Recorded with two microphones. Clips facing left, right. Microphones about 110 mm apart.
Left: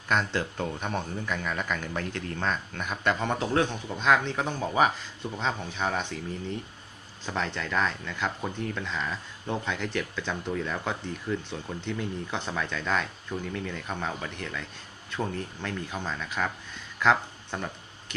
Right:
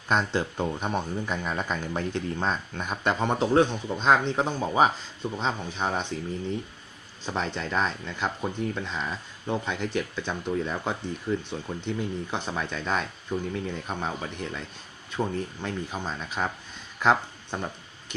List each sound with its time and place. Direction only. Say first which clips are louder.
0.1 s speech: right 2 dB; 20° right (ahead or behind)
7.3 s speech: right 1 dB; 15° right (ahead or behind)